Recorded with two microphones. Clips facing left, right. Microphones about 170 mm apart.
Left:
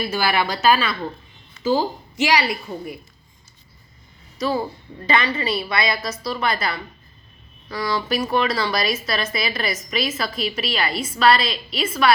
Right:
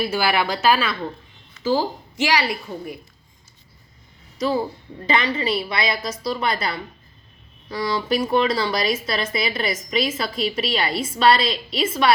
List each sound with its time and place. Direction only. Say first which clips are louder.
0.0 s a woman's voice: right 1 dB; 5° right (ahead or behind)
2.3 s a woman's voice: left 2 dB; 10° left (ahead or behind)
4.4 s a woman's voice: right 1 dB; 15° right (ahead or behind)